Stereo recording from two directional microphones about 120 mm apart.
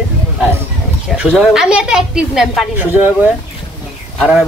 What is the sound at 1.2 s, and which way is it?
Speech, 5° right (ahead or behind).